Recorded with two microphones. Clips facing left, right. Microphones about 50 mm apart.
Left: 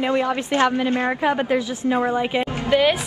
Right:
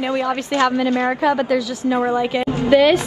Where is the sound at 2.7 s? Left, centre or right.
Centre.